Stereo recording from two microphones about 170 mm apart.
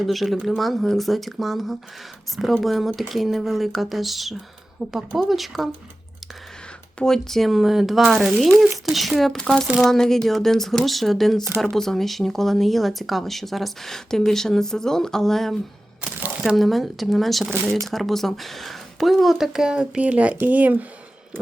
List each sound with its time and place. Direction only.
0.0 s speech: centre (ahead or behind)
7.0 s speech: centre (ahead or behind)